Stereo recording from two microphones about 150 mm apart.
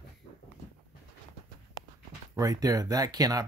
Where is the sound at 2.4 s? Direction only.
25° right (ahead or behind).